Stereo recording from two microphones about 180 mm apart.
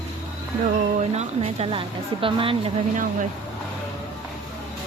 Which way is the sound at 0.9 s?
35° right (ahead or behind).